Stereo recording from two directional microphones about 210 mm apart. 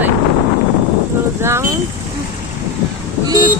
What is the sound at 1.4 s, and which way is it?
Speech, 10° right (ahead or behind).